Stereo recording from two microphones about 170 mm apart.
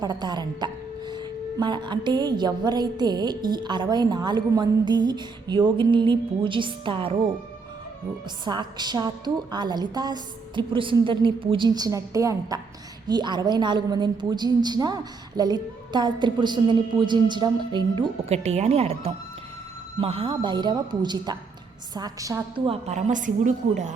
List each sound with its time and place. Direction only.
0.0 s speech: 25° right (ahead or behind)
8.4 s speech: 25° right (ahead or behind)
22.6 s a woman's voice: 35° right (ahead or behind)